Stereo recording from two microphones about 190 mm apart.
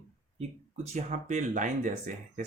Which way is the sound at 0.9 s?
40° right (ahead or behind).